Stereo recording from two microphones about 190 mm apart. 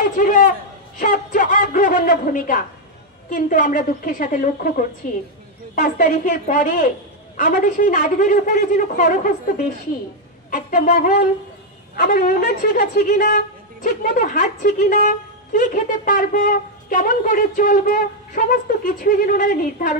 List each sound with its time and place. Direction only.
0.1 s a man's voice: 45° left (ahead or behind)
10.5 s a woman's voice: 45° left (ahead or behind)